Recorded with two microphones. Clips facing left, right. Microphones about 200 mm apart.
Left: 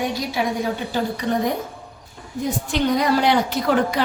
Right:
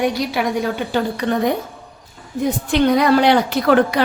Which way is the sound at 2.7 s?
70° right (ahead or behind).